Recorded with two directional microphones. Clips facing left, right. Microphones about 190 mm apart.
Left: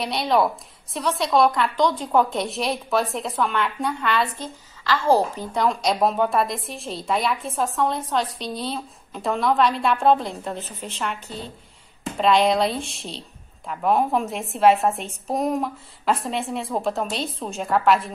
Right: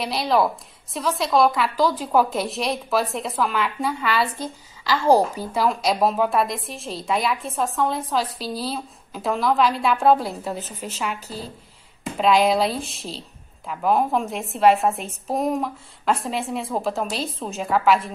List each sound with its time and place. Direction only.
0.0 s a woman's voice: centre (ahead or behind)